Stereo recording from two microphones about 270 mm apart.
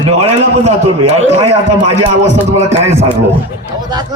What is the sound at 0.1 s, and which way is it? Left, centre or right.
Speech, right.